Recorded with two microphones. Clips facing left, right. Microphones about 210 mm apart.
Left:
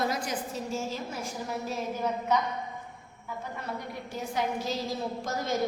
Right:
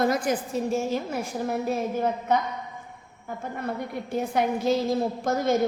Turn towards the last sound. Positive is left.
turn(degrees=-55)  # may be behind; listen again after turning